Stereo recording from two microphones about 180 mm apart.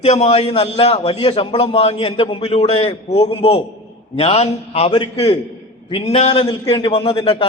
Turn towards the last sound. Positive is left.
turn(degrees=30)  # may be behind; listen again after turning